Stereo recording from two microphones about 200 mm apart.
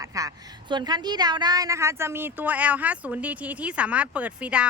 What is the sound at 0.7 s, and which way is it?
A woman's voice, 20° right (ahead or behind).